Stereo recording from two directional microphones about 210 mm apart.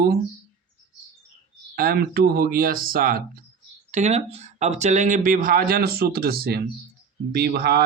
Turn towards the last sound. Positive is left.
turn(degrees=-50)  # may be behind; listen again after turning